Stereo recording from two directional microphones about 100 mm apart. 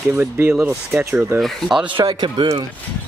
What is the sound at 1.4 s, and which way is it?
Speech, centre (ahead or behind).